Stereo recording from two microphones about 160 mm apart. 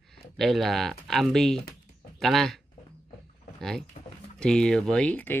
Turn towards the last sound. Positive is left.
turn(degrees=10)  # may be behind; listen again after turning